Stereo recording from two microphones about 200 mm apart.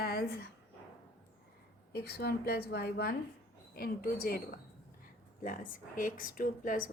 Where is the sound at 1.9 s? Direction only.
50° left (ahead or behind).